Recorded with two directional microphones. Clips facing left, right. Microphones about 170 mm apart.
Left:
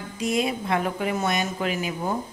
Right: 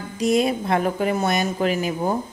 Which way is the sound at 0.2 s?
40° right (ahead or behind).